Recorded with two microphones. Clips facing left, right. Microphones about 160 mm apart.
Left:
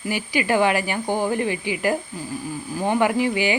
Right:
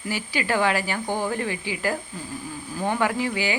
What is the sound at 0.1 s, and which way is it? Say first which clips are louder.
Speech: left 4 dB; 15° left (ahead or behind).